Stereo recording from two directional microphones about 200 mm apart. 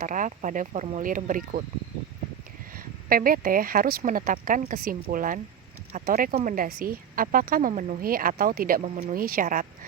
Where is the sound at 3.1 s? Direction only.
45° right (ahead or behind).